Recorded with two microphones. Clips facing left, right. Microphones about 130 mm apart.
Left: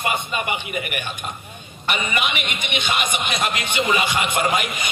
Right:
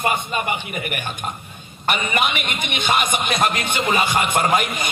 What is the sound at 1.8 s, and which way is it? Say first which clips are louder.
A man's voice: right 3 dB; 45° right (ahead or behind).